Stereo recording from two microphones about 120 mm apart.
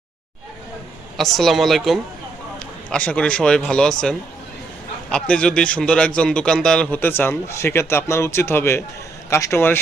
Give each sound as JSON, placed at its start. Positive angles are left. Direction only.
{"t": 1.1, "sound": "a woman's voice", "side_deg": 0}